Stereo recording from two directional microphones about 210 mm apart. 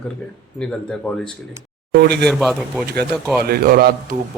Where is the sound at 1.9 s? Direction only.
50° right (ahead or behind).